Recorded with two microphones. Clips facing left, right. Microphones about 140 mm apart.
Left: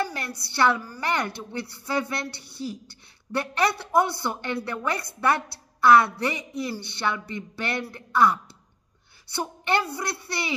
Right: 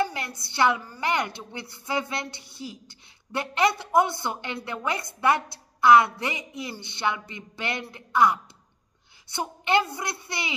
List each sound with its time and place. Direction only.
0.0 s a woman's voice: 20° right (ahead or behind)